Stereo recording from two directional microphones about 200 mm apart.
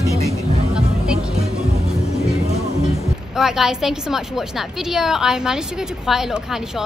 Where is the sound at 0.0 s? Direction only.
15° left (ahead or behind).